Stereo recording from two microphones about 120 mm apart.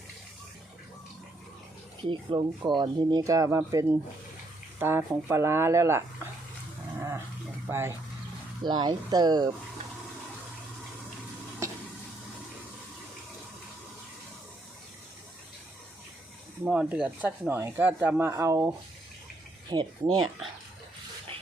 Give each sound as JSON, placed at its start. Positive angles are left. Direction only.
{"t": 2.0, "sound": "speech", "side_deg": -45}
{"t": 7.7, "sound": "speech", "side_deg": -20}
{"t": 8.6, "sound": "speech", "side_deg": -40}
{"t": 11.6, "sound": "a sound", "side_deg": -25}
{"t": 16.6, "sound": "speech", "side_deg": -10}
{"t": 19.7, "sound": "speech", "side_deg": -35}